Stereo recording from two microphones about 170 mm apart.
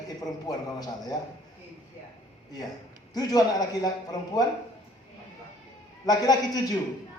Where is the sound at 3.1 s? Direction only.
20° left (ahead or behind).